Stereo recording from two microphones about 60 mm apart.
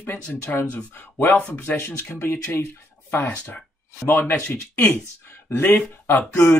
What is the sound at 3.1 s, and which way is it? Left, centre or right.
Speech, left.